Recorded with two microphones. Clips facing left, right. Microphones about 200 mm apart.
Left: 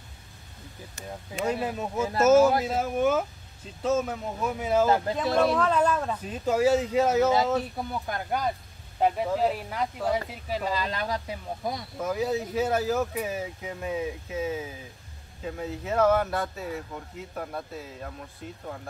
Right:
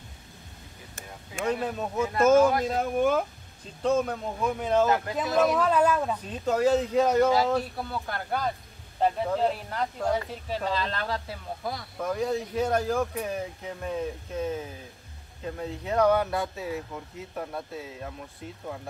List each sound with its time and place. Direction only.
1.4 s speech: 10° left (ahead or behind)
4.8 s speech: 30° left (ahead or behind)
5.5 s speech: 5° right (ahead or behind)
7.7 s speech: 15° left (ahead or behind)
12.0 s speech: 5° left (ahead or behind)